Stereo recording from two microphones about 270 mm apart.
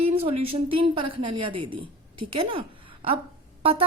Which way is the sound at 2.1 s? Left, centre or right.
Right.